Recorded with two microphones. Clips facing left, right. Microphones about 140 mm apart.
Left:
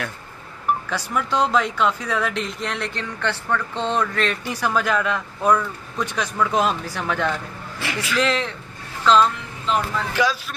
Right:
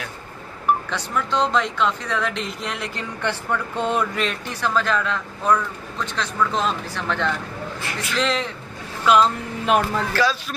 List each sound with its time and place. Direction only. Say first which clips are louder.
0.8 s speech: left 1 dB; 5° left (ahead or behind)
4.5 s speech: right 1 dB; 10° left (ahead or behind)
7.8 s a man's voice: left 8 dB; 90° left
8.2 s speech: left 1 dB; centre (ahead or behind)
9.7 s speech: right 3 dB; 60° right (ahead or behind)
10.1 s speech: even; 15° left (ahead or behind)